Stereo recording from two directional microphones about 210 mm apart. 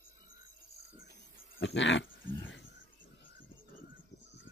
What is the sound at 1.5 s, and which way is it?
Dog, 60° left (ahead or behind).